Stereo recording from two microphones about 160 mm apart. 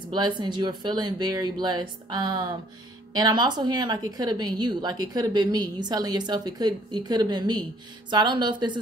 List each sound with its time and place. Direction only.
0.1 s a woman's voice: 25° right (ahead or behind)